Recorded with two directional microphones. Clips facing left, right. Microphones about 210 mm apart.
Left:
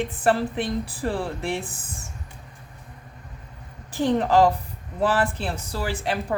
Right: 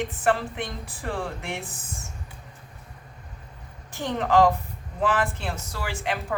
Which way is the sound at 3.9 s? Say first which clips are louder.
Left 3 dB; 35° left (ahead or behind).